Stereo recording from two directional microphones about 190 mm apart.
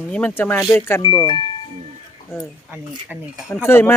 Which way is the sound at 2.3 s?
15° left (ahead or behind).